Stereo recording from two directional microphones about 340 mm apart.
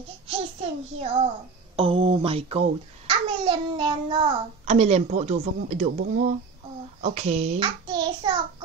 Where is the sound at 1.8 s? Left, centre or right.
Centre.